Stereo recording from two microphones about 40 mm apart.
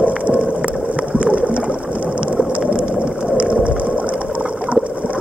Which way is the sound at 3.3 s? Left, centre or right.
Right.